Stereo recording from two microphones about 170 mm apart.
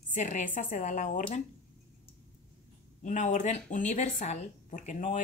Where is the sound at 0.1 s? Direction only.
45° left (ahead or behind).